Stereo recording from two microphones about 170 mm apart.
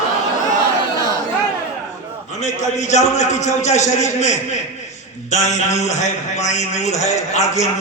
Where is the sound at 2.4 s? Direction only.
40° left (ahead or behind).